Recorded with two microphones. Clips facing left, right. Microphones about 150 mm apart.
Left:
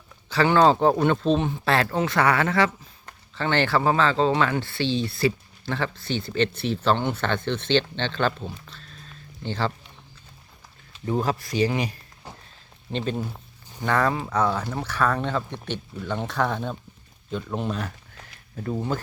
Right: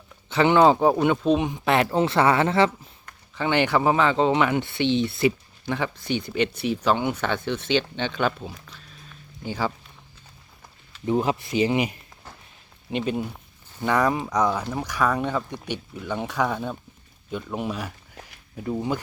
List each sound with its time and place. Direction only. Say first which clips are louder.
0.3 s speech: right 1 dB; 20° right (ahead or behind)
3.3 s speech: right 1 dB; 15° right (ahead or behind)
11.2 s speech: left 1 dB; 20° right (ahead or behind)